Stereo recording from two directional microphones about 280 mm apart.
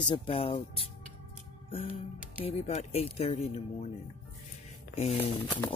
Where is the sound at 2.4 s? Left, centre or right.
Left.